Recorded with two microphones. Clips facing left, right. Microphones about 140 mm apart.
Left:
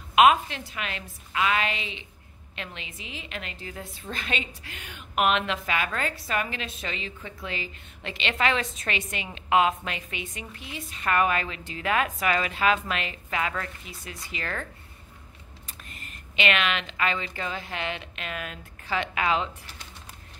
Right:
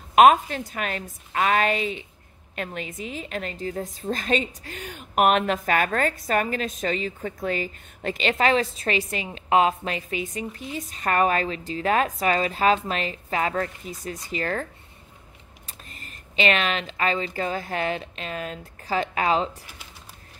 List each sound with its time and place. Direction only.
0.1 s a woman's voice: 45° right (ahead or behind)